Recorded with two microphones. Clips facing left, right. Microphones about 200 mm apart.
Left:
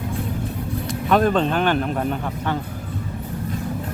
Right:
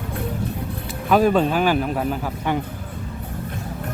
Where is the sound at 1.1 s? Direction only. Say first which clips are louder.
Right 1 dB; 5° right (ahead or behind).